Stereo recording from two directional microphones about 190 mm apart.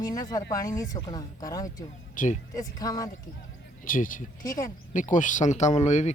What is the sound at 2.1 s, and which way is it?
Speech, 45° left (ahead or behind).